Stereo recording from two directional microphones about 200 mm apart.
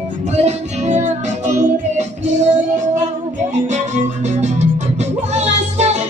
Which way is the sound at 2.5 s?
40° right (ahead or behind).